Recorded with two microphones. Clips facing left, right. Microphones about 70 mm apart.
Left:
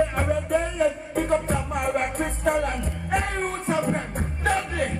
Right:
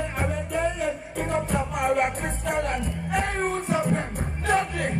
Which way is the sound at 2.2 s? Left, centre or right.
Left.